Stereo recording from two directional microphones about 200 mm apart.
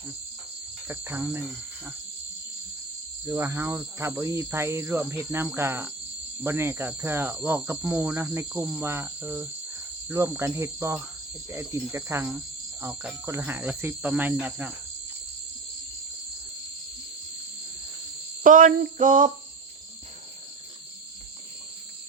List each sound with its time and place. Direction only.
0.9 s speech: 10° right (ahead or behind)
3.2 s speech: 10° right (ahead or behind)
18.4 s a sound: 40° right (ahead or behind)